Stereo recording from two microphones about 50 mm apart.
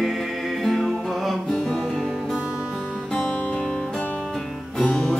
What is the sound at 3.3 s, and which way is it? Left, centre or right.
Music, left.